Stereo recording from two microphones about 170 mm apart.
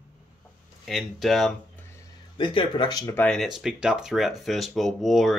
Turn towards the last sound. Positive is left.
turn(degrees=0)  # may be behind; listen again after turning